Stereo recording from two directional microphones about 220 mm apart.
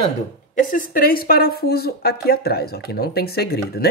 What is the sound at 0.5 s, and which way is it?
Speech, 40° left (ahead or behind).